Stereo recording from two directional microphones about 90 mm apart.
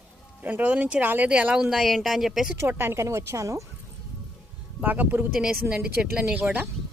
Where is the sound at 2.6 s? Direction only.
25° right (ahead or behind).